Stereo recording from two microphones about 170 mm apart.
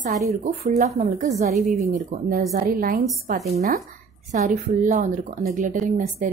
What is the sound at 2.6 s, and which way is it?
Speech, 60° right (ahead or behind).